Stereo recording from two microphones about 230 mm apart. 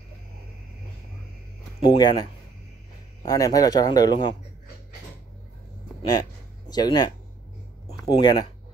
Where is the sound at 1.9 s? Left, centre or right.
Centre.